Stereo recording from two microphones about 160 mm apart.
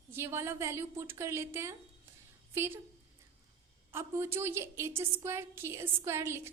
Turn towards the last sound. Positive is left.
turn(degrees=-15)  # may be behind; listen again after turning